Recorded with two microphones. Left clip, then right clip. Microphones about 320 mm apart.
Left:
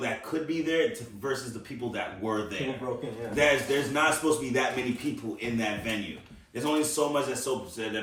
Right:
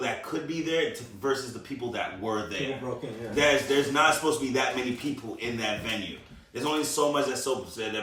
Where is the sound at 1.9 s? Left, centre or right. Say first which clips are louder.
Right 1 dB; centre.